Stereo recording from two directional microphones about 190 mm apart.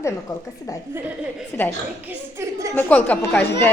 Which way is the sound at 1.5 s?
10° left (ahead or behind).